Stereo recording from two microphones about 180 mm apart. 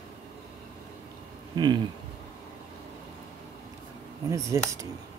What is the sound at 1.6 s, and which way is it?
Speech, 25° right (ahead or behind).